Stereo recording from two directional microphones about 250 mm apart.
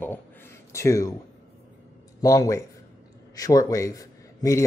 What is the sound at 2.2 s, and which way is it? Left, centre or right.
Speech, centre.